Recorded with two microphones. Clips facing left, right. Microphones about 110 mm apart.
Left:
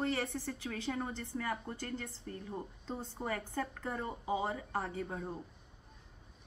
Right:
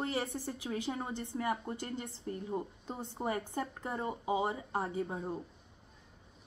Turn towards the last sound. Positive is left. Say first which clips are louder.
# right 3 dB
turn(degrees=-20)  # may be behind; listen again after turning